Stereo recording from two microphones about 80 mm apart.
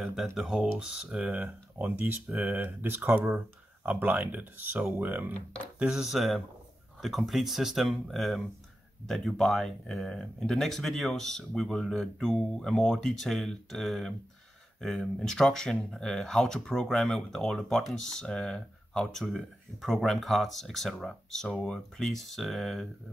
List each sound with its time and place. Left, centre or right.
0.0 s speech: centre; by 5.3 s right
5.8 s speech: centre